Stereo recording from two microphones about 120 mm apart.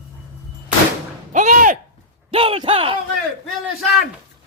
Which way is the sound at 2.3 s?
50° right (ahead or behind).